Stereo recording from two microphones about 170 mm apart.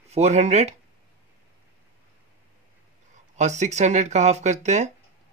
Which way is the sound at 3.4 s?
45° right (ahead or behind).